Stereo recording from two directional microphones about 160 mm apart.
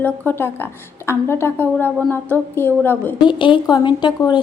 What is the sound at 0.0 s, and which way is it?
A woman's voice, 10° left (ahead or behind).